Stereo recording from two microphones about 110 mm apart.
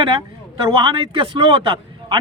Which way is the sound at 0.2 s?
50° right (ahead or behind).